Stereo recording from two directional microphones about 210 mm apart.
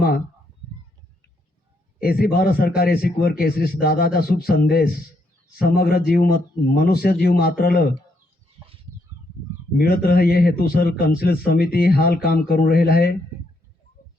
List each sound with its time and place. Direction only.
2.0 s a man's voice: 45° left (ahead or behind)
9.7 s a man's voice: 45° left (ahead or behind)